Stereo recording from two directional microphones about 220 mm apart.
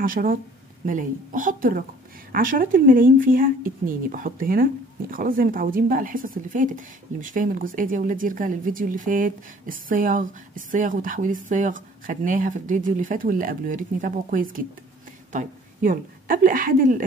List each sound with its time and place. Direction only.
0.0 s a woman's voice: 40° right (ahead or behind)